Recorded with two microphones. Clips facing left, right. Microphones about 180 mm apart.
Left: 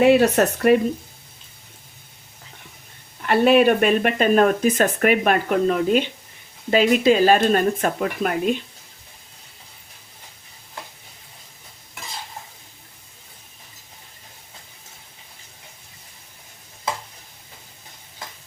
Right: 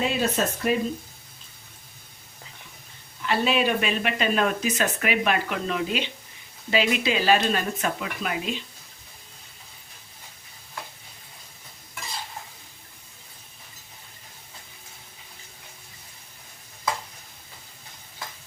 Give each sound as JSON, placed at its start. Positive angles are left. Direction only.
{"t": 0.0, "sound": "speech", "side_deg": 65}
{"t": 3.2, "sound": "speech", "side_deg": 55}